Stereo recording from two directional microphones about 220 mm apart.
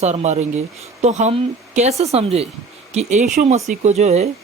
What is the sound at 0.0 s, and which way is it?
Speech, 30° right (ahead or behind).